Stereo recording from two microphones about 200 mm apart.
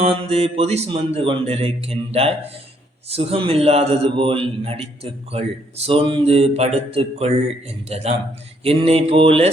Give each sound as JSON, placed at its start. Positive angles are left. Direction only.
{"t": 0.0, "sound": "a man's voice", "side_deg": -30}